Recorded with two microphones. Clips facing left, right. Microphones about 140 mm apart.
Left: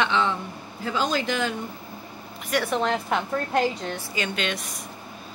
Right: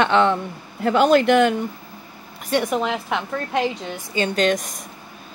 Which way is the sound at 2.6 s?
5° right (ahead or behind).